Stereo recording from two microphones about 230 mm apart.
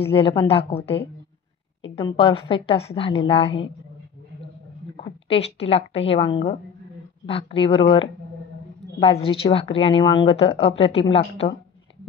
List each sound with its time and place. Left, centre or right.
0.0 s speech: left
4.9 s a woman's voice: left